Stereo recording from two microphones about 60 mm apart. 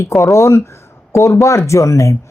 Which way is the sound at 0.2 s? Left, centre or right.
Left.